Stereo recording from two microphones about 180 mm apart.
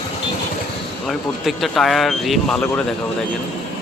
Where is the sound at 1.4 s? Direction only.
Centre (ahead or behind).